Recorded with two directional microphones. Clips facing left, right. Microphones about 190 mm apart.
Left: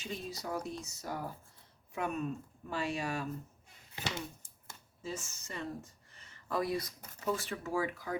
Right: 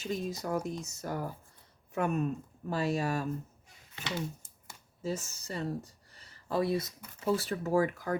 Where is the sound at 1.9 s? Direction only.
45° right (ahead or behind).